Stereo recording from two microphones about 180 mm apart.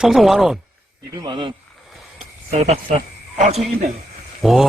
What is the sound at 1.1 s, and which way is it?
Speech, 25° right (ahead or behind).